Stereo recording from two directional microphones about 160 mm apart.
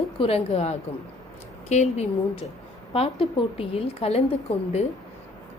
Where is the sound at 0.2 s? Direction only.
40° left (ahead or behind).